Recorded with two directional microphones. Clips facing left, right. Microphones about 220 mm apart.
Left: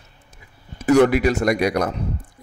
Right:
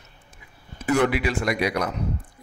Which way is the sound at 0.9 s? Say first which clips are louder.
Left 7 dB; 45° left (ahead or behind).